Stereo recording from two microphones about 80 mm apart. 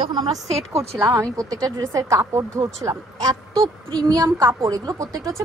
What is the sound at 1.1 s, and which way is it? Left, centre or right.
Speech, right.